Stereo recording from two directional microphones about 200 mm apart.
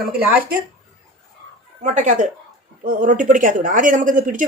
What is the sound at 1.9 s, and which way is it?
Speech, 35° right (ahead or behind).